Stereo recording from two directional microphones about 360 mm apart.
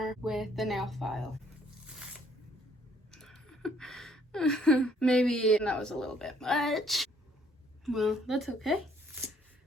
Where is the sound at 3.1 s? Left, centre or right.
Centre.